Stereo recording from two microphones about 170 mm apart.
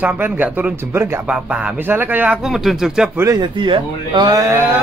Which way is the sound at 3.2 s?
25° right (ahead or behind).